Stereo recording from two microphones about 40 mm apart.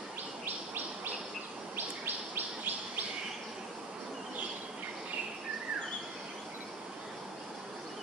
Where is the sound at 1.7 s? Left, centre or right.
Right.